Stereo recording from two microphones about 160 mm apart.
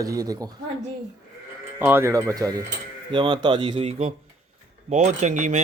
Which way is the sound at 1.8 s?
15° right (ahead or behind).